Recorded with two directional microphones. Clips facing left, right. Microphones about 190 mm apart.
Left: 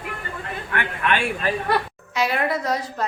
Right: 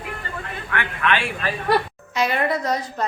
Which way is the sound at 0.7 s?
45° left (ahead or behind).